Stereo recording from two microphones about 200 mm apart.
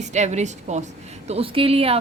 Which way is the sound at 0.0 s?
35° right (ahead or behind).